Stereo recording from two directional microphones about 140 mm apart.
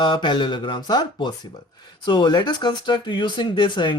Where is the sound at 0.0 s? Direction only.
35° left (ahead or behind).